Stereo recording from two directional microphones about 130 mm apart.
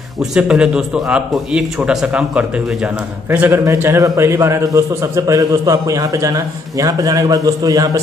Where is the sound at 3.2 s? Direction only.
15° right (ahead or behind).